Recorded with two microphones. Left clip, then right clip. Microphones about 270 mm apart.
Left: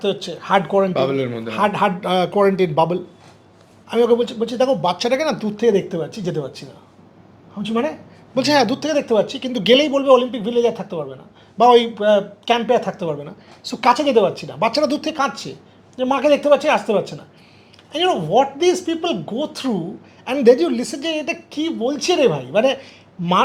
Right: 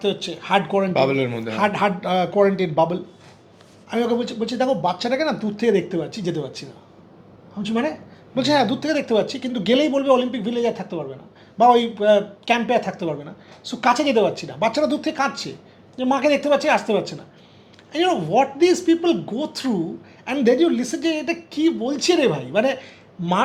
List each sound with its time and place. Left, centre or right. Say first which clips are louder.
0.0 s a man's voice: left 2 dB; left
0.9 s a man's voice: even; centre
1.5 s a man's voice: left 3 dB; left